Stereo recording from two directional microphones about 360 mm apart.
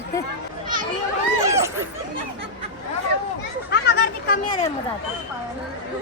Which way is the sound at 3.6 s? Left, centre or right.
Left.